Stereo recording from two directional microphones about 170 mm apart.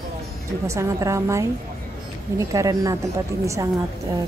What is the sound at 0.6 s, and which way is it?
A woman's voice, 20° right (ahead or behind).